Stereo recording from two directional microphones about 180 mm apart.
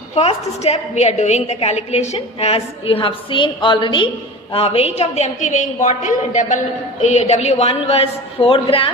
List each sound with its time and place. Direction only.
0.1 s a woman's voice: 35° left (ahead or behind)